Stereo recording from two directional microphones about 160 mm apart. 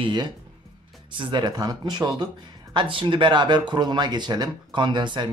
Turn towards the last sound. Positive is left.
turn(degrees=-30)  # may be behind; listen again after turning